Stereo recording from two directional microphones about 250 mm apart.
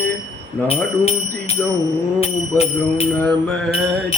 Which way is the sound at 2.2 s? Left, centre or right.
Left.